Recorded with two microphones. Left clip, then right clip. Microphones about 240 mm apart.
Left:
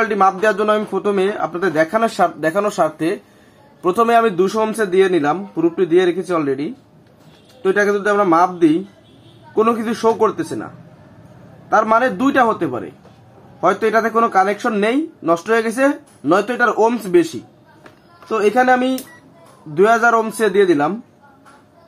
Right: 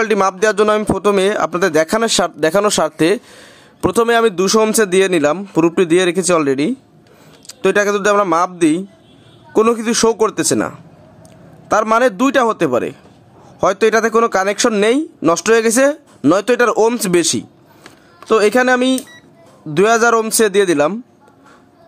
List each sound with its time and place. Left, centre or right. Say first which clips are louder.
0.0 s speech: right 1 dB; right
11.7 s speech: right 1 dB; right
18.3 s speech: right 2 dB; right